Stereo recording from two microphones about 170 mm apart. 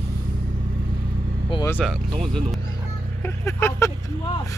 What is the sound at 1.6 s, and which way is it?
Speech, 10° left (ahead or behind).